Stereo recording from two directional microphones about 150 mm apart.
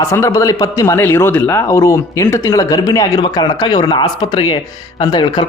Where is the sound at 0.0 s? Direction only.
20° left (ahead or behind).